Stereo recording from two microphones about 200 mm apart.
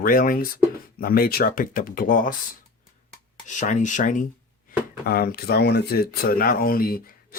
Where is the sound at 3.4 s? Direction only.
40° left (ahead or behind).